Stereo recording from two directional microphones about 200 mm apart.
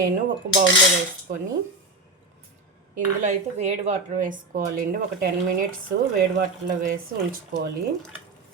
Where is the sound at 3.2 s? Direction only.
35° right (ahead or behind).